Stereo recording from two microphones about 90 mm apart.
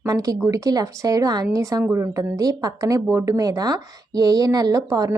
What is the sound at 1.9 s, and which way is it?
Speech, 35° right (ahead or behind).